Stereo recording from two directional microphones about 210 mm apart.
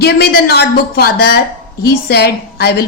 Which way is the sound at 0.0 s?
50° left (ahead or behind).